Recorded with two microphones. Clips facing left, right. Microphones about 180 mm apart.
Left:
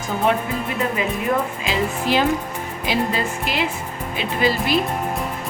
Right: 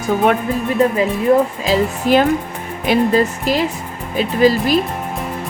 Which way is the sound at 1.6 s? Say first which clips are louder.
Right 6 dB; 45° right (ahead or behind).